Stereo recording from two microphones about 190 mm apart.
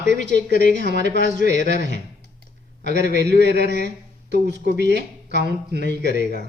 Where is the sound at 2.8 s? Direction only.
65° right (ahead or behind).